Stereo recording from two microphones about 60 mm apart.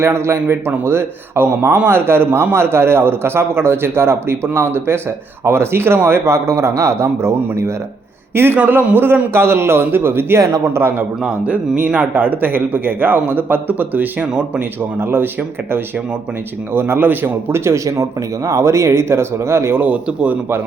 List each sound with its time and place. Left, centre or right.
0.0 s a man's voice: right
8.5 s a man's voice: right
10.4 s a man's voice: right
11.4 s speech: right
12.1 s speech: right
15.0 s speech: right
16.7 s speech: right
17.5 s a man's voice: right
19.8 s speech: right